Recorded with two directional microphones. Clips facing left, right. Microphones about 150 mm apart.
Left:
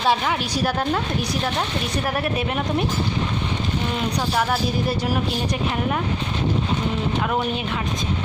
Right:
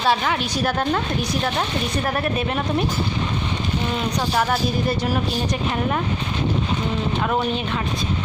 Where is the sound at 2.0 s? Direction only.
10° left (ahead or behind).